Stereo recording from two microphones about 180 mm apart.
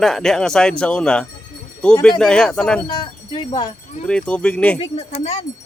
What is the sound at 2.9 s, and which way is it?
Speech, 25° left (ahead or behind).